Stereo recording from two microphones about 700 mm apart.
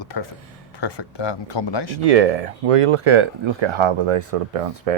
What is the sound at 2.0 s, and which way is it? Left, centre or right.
Speech, right.